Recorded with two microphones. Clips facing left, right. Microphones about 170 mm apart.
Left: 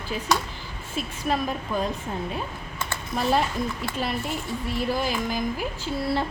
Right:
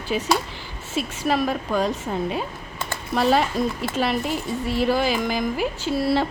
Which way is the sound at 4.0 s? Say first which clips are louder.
Right 6 dB; 90° right.